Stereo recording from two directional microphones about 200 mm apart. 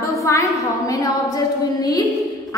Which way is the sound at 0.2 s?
15° left (ahead or behind).